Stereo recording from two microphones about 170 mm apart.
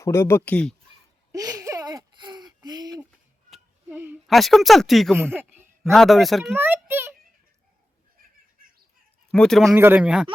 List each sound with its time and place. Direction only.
0.0 s speech: 15° left (ahead or behind)
1.3 s a sound: 20° right (ahead or behind)
3.5 s a sound: 10° right (ahead or behind)
4.3 s speech: centre (ahead or behind)
5.1 s speech: 10° right (ahead or behind)
5.8 s speech: centre (ahead or behind)
6.5 s a sound: 10° right (ahead or behind)
9.3 s speech: 5° left (ahead or behind)
9.7 s speech: 10° right (ahead or behind)